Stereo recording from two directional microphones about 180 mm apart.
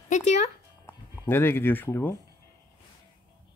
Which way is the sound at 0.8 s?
15° left (ahead or behind).